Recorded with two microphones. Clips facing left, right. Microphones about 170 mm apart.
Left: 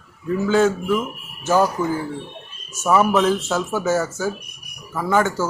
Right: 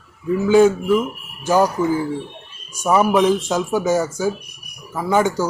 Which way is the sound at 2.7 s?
15° right (ahead or behind).